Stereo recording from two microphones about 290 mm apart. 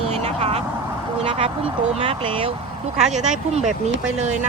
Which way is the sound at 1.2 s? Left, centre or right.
Centre.